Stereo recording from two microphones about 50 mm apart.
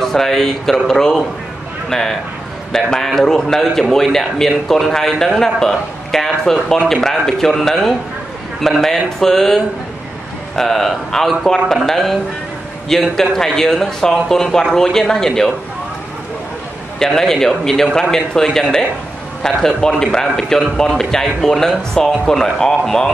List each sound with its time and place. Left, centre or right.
0.0 s speech: centre
17.0 s speech: centre